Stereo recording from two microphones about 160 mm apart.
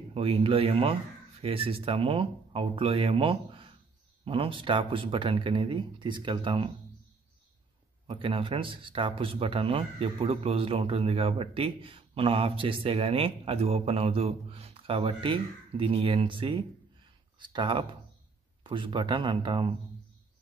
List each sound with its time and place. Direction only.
0.1 s speech: 35° right (ahead or behind)
8.1 s speech: 35° right (ahead or behind)